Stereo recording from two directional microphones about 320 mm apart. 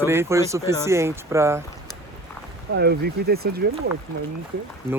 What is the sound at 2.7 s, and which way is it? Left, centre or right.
Speech, right.